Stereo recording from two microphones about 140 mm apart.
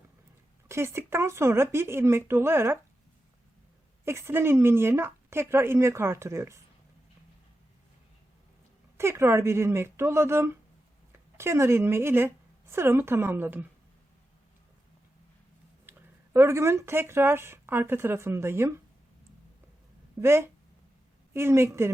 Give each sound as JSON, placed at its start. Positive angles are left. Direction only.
{"t": 0.7, "sound": "speech", "side_deg": -20}
{"t": 4.0, "sound": "speech", "side_deg": -20}
{"t": 9.0, "sound": "speech", "side_deg": -20}
{"t": 15.9, "sound": "speech", "side_deg": -15}
{"t": 20.2, "sound": "speech", "side_deg": -20}